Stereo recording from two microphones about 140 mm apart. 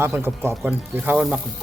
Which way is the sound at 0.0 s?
15° right (ahead or behind).